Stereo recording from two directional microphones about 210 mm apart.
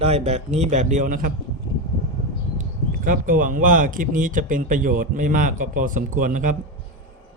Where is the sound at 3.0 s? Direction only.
40° right (ahead or behind).